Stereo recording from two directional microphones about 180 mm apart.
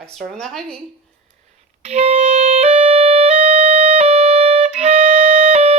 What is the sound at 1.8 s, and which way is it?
Clarinet, 35° right (ahead or behind).